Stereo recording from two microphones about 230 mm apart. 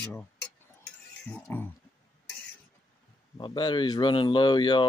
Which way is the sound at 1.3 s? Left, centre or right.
Centre.